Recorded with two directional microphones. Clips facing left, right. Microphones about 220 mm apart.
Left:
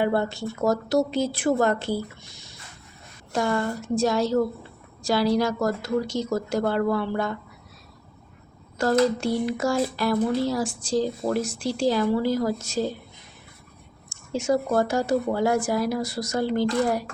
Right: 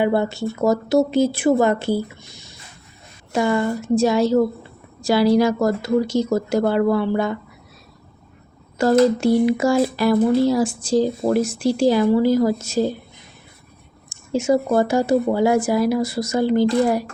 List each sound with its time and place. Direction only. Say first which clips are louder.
0.0 s speech: right 5 dB; 5° right (ahead or behind)
8.8 s speech: right 6 dB; 5° right (ahead or behind)
14.1 s speech: right 5 dB; 5° right (ahead or behind)
16.6 s speech: right 6 dB; 30° right (ahead or behind)